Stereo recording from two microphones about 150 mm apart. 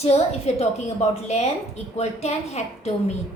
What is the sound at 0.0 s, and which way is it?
A woman's voice, 45° left (ahead or behind).